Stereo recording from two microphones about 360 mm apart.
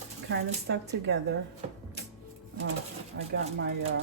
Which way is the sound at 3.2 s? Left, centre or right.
Right.